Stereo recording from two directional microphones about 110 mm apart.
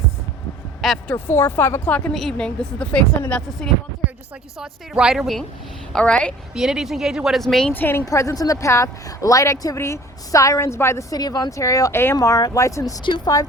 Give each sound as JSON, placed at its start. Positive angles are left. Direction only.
{"t": 1.0, "sound": "a woman's voice", "side_deg": 20}
{"t": 4.5, "sound": "a woman's voice", "side_deg": -5}
{"t": 6.5, "sound": "speech", "side_deg": -5}
{"t": 7.7, "sound": "a woman's voice", "side_deg": 20}
{"t": 8.0, "sound": "a woman's voice", "side_deg": 30}
{"t": 12.1, "sound": "speech", "side_deg": 30}